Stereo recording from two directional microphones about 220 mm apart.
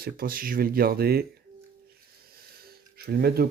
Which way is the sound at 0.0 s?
40° right (ahead or behind).